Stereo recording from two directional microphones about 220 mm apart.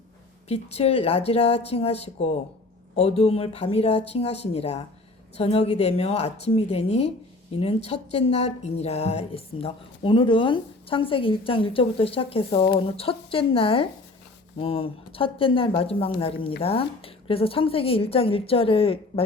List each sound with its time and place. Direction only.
0.4 s a woman's voice: 30° left (ahead or behind)